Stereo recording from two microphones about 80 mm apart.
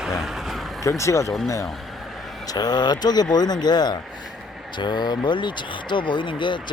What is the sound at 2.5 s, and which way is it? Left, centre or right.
Speech, left.